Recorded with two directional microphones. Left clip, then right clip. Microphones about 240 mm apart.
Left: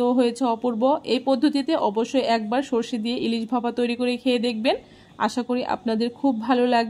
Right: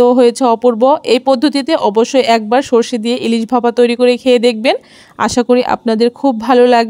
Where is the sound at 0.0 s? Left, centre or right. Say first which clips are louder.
Right 13 dB; right.